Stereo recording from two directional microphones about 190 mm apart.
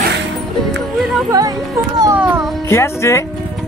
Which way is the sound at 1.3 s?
20° right (ahead or behind).